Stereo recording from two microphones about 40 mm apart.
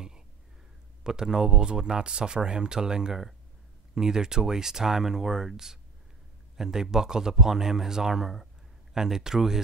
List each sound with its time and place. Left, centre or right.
1.0 s speech: centre